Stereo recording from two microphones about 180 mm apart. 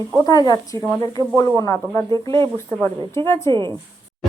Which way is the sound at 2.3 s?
30° right (ahead or behind).